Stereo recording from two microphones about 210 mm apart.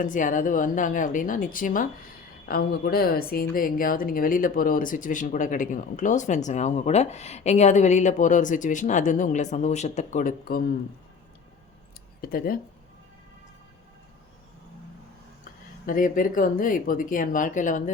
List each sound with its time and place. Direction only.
0.0 s speech: 40° left (ahead or behind)
12.2 s speech: 45° left (ahead or behind)
15.9 s speech: 40° left (ahead or behind)